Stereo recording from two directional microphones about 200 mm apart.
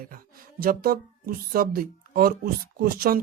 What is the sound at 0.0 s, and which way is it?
Speech, 45° right (ahead or behind).